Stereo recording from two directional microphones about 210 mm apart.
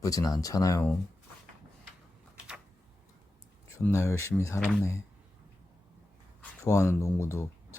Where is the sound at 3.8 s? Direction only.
15° left (ahead or behind).